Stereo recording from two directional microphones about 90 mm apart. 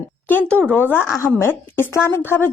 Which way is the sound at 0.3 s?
20° left (ahead or behind).